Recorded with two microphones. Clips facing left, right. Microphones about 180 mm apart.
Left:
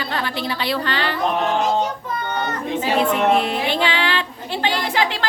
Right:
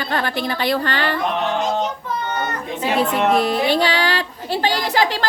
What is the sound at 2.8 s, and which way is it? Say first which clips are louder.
A woman's voice: right 1 dB; 40° right (ahead or behind).